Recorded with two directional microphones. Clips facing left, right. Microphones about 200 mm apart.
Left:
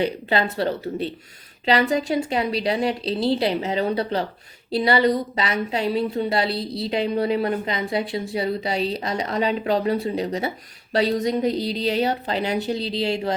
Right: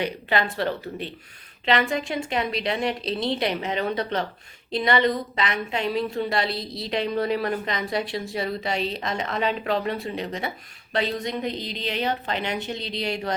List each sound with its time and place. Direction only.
0.0 s a woman's voice: 30° left (ahead or behind)
1.6 s a woman's voice: 35° left (ahead or behind)